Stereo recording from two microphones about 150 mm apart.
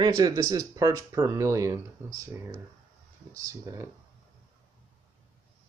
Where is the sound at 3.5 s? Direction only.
20° right (ahead or behind).